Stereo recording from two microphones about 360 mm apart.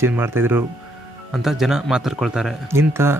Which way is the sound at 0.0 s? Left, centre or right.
Centre.